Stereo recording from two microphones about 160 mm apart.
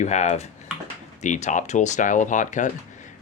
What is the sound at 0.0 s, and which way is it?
Speech, 45° left (ahead or behind).